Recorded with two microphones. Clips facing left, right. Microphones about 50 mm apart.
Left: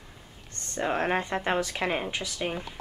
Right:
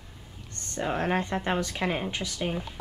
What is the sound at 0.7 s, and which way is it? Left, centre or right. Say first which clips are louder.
Speech: left 1 dB; centre.